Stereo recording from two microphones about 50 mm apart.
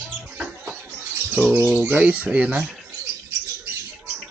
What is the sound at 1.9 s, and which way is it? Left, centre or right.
Speech, right.